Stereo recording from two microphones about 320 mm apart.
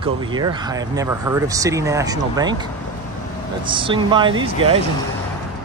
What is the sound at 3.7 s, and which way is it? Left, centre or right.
Speech, centre.